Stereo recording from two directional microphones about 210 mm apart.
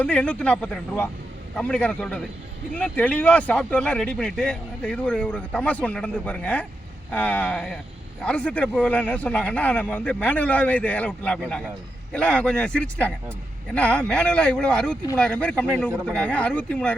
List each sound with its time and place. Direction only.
0.0 s speech: 5° left (ahead or behind)